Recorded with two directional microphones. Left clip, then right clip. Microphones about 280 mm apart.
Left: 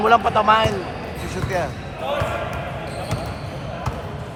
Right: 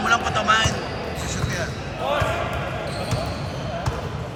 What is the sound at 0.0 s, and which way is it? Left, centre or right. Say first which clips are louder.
Speech: left 5 dB; centre.